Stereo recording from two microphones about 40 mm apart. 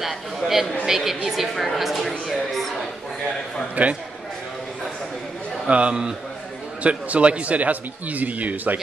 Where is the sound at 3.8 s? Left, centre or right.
Right.